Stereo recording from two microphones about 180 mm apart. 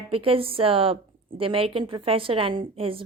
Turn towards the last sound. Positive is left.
turn(degrees=-30)  # may be behind; listen again after turning